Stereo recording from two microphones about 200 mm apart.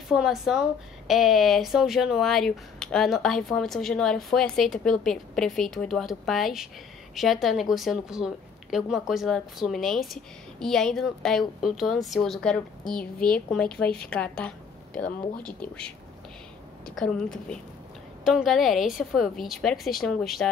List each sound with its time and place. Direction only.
0.1 s a woman's voice: centre (ahead or behind)